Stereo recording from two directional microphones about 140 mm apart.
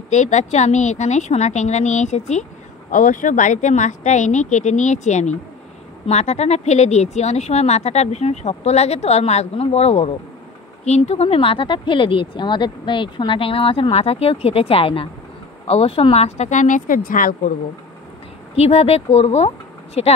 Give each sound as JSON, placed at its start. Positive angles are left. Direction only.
{"t": 0.1, "sound": "speech", "side_deg": 55}
{"t": 2.9, "sound": "speech", "side_deg": 70}
{"t": 18.6, "sound": "speech", "side_deg": 45}